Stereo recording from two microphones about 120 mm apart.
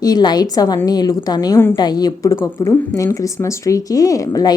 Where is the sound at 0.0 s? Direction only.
35° left (ahead or behind).